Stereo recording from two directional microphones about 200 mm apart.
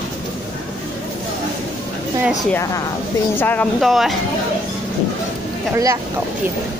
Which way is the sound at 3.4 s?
10° left (ahead or behind).